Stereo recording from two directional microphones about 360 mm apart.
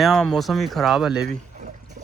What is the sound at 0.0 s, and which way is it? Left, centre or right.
Speech, centre.